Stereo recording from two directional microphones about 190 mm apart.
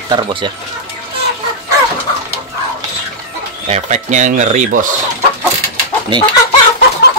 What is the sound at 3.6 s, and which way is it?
Speech, 35° right (ahead or behind).